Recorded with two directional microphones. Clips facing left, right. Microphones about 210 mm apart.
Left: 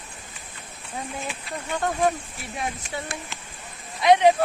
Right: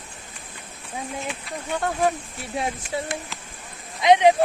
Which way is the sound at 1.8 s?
Centre (ahead or behind).